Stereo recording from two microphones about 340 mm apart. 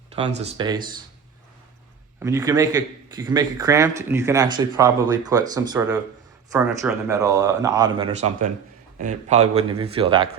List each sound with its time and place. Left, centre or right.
0.2 s a man's voice: centre
2.1 s a man's voice: centre